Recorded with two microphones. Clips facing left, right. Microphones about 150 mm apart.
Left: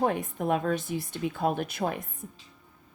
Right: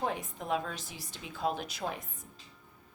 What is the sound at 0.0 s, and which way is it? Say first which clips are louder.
Speech: left 8 dB; 55° left (ahead or behind).